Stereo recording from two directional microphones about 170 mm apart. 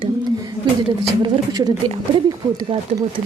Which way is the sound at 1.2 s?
25° right (ahead or behind).